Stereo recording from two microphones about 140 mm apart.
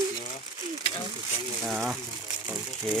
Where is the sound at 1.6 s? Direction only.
5° right (ahead or behind).